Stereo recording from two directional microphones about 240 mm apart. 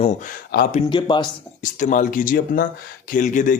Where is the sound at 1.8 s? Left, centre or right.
Left.